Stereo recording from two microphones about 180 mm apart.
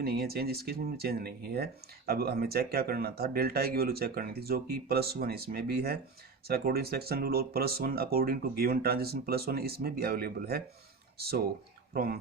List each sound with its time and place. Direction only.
0.0 s speech: 60° right (ahead or behind)